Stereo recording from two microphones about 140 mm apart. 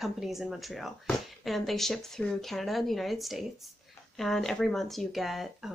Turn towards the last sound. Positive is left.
turn(degrees=0)  # may be behind; listen again after turning